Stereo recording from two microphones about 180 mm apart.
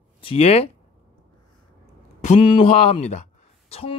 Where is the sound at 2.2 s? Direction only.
30° left (ahead or behind).